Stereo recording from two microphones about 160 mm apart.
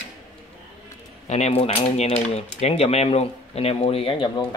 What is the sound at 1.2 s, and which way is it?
Speech, 45° left (ahead or behind).